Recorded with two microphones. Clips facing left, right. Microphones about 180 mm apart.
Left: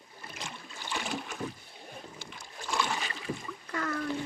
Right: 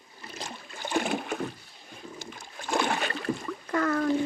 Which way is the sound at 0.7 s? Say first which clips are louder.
Right 8 dB; 50° right (ahead or behind).